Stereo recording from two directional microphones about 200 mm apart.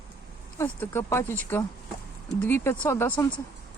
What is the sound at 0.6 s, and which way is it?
Speech, 10° left (ahead or behind).